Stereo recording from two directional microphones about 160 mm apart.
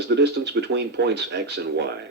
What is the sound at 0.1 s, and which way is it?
Speech, 90° right.